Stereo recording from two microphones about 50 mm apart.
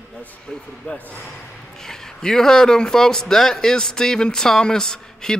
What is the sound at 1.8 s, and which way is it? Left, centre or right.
A man's voice, centre.